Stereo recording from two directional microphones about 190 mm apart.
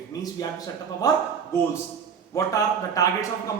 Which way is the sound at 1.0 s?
20° left (ahead or behind).